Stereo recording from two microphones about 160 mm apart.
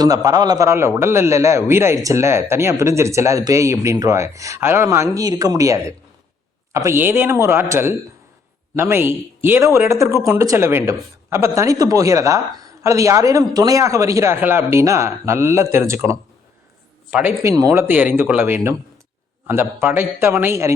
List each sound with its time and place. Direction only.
0.0 s a man's voice: 25° right (ahead or behind); by 17.3 s 10° right (ahead or behind)
17.4 s a man's voice: 20° right (ahead or behind)